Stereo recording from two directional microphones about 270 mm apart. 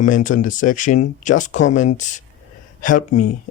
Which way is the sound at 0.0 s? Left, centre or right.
Left.